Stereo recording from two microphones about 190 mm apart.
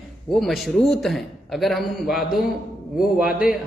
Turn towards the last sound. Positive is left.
turn(degrees=-5)  # may be behind; listen again after turning